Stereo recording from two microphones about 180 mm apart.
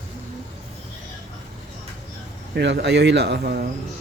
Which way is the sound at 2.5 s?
70° right (ahead or behind).